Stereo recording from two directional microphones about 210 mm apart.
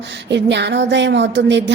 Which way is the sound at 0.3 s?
55° right (ahead or behind).